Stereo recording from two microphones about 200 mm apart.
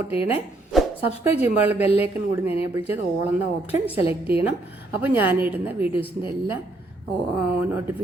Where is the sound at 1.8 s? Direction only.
30° left (ahead or behind).